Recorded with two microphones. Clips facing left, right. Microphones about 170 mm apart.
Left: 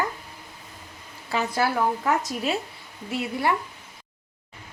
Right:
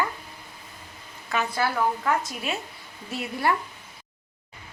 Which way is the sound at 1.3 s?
30° left (ahead or behind).